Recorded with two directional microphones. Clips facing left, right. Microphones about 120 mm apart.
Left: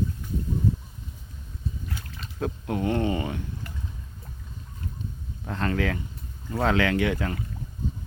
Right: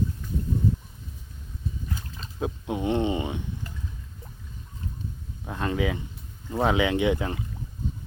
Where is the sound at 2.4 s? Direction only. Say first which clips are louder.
Left 1 dB; 15° right (ahead or behind).